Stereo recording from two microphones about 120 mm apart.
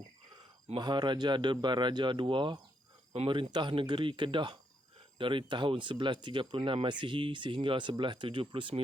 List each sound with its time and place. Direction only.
0.7 s a man's voice: 40° right (ahead or behind)
6.6 s speech: 55° right (ahead or behind)
6.8 s speech: 40° right (ahead or behind)